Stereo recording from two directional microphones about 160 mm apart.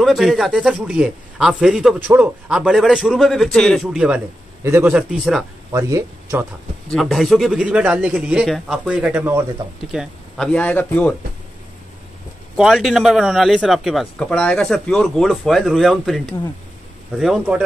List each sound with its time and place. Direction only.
0.0 s a man's voice: centre (ahead or behind)
5.7 s speech: 20° right (ahead or behind)
6.9 s speech: centre (ahead or behind)
9.9 s speech: centre (ahead or behind)
12.5 s speech: centre (ahead or behind)